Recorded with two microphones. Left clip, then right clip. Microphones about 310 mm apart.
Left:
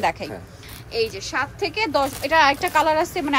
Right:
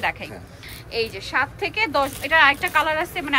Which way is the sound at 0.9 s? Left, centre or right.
Centre.